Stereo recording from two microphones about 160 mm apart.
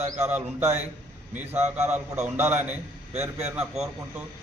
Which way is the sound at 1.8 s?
45° right (ahead or behind).